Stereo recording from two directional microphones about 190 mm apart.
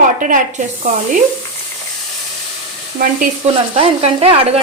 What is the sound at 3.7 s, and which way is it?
Speech, 30° right (ahead or behind).